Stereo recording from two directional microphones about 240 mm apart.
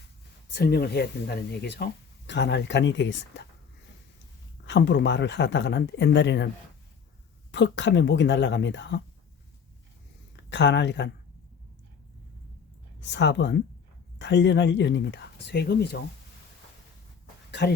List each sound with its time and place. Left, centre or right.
0.5 s speech: left
4.6 s speech: left
7.5 s speech: left
10.3 s speech: left
13.0 s speech: left
17.5 s speech: left